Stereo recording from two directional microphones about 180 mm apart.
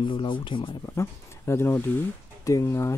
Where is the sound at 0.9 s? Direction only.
15° left (ahead or behind).